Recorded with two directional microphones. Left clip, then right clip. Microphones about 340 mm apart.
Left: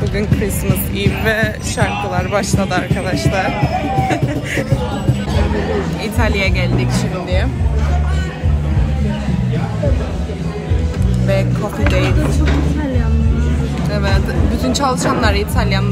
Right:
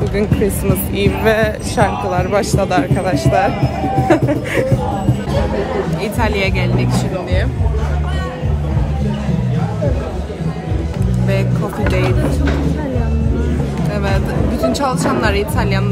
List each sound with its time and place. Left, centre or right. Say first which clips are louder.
0.2 s speech: right 3 dB; centre
4.1 s music: right 4 dB; right
6.1 s speech: even; centre
13.8 s vehicle: left 1 dB; centre
14.6 s speech: even; centre